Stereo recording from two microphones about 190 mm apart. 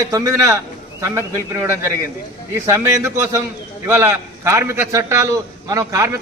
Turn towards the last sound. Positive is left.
turn(degrees=-15)  # may be behind; listen again after turning